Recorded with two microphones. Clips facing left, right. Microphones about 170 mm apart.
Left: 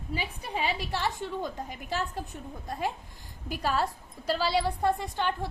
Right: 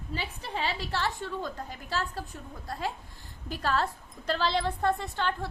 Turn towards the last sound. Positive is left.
turn(degrees=15)  # may be behind; listen again after turning